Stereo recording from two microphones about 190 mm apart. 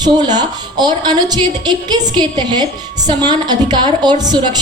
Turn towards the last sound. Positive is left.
turn(degrees=-20)  # may be behind; listen again after turning